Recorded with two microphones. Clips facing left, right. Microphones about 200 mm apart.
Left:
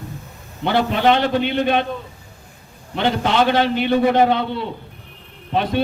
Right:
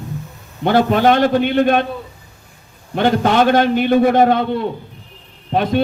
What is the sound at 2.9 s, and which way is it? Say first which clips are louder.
A man's voice: right 4 dB; 50° right (ahead or behind).